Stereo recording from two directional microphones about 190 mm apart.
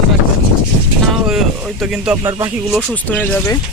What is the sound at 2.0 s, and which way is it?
Speech, 5° right (ahead or behind).